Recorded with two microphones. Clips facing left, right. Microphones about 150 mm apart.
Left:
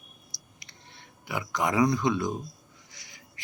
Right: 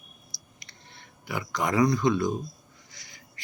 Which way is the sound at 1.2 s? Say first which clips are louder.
Even; 15° left (ahead or behind).